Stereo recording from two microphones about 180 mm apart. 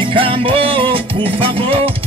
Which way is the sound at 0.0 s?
30° right (ahead or behind).